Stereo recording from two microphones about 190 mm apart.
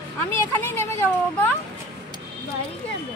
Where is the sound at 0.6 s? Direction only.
10° left (ahead or behind).